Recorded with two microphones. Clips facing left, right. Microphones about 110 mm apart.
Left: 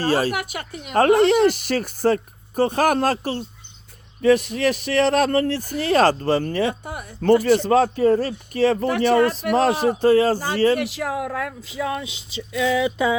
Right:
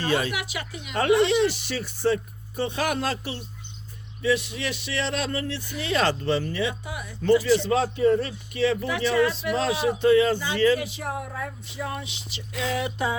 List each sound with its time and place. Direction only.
0.0 s speech: 40° left (ahead or behind)
10.8 s speech: 90° left